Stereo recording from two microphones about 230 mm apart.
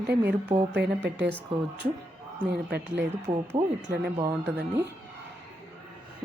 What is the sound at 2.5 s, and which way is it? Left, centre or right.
Speech, right.